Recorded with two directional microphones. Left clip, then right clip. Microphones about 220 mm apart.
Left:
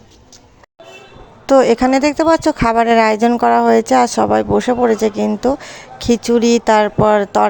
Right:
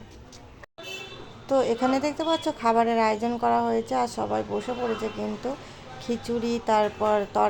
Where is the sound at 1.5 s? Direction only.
40° left (ahead or behind).